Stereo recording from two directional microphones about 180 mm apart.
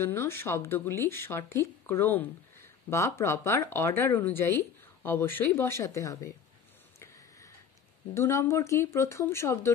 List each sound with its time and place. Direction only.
0.0 s speech: 15° left (ahead or behind)
7.0 s a sound: 15° left (ahead or behind)
8.1 s speech: 15° left (ahead or behind)